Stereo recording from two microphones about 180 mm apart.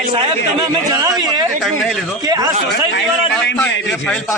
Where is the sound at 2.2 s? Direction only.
20° right (ahead or behind).